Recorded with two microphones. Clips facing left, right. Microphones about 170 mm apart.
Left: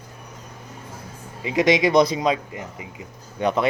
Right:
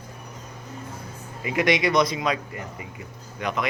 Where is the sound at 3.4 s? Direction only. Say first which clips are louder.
Left 6 dB; 30° left (ahead or behind).